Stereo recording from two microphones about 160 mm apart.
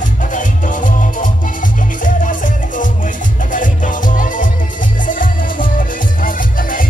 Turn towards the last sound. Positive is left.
turn(degrees=60)  # may be behind; listen again after turning